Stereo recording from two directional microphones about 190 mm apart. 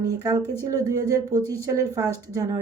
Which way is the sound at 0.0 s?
20° right (ahead or behind).